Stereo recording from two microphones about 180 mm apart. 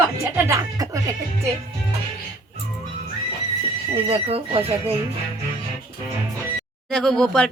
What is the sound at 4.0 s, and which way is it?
Speech, 30° right (ahead or behind).